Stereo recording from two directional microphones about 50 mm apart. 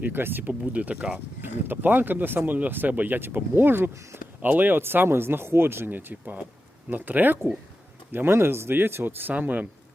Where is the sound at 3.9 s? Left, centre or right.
Right.